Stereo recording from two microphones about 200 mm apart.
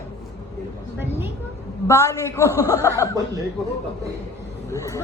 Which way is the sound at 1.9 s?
15° left (ahead or behind).